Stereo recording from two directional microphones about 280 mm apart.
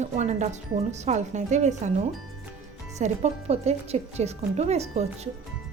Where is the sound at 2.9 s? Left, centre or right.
Right.